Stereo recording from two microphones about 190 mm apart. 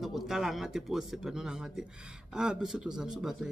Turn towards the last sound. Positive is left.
turn(degrees=-5)  # may be behind; listen again after turning